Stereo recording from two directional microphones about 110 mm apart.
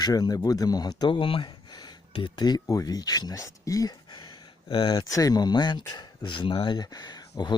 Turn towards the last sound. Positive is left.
turn(degrees=40)  # may be behind; listen again after turning